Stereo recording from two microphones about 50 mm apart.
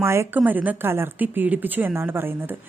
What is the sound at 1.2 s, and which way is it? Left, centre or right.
Speech, right.